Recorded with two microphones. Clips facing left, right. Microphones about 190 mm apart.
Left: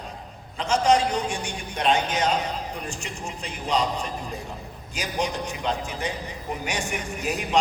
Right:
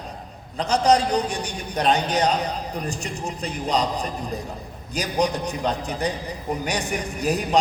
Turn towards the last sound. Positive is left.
turn(degrees=-35)  # may be behind; listen again after turning